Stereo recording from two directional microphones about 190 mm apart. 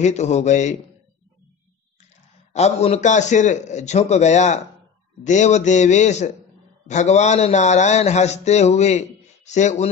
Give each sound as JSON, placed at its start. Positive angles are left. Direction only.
{"t": 0.0, "sound": "a man's voice", "side_deg": 35}
{"t": 2.5, "sound": "a man's voice", "side_deg": 35}